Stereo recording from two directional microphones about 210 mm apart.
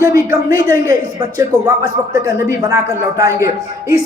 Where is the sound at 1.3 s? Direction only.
15° right (ahead or behind).